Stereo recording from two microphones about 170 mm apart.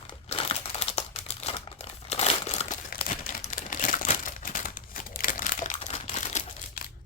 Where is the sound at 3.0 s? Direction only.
50° left (ahead or behind).